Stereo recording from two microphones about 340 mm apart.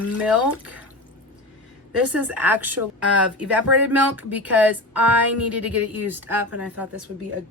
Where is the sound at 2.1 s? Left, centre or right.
Centre.